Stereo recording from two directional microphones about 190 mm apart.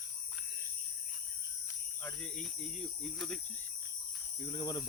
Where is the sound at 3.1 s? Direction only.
5° left (ahead or behind).